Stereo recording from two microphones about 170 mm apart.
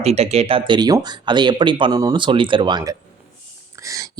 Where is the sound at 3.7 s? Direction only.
20° right (ahead or behind).